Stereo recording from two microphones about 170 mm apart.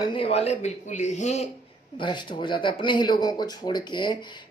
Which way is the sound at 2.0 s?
25° left (ahead or behind).